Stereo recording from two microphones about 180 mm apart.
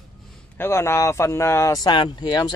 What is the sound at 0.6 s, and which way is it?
Speech, 15° left (ahead or behind).